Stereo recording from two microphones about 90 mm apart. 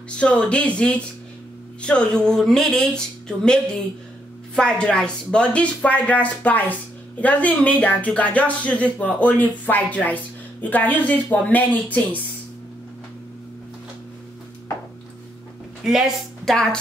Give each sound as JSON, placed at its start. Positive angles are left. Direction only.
{"t": 0.2, "sound": "speech", "side_deg": 15}
{"t": 15.8, "sound": "a woman's voice", "side_deg": -5}